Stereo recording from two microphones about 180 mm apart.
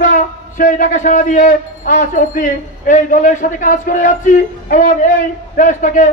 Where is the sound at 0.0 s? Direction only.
45° left (ahead or behind).